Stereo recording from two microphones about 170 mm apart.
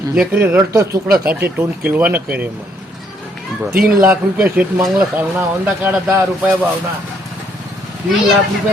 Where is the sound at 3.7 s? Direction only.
55° right (ahead or behind).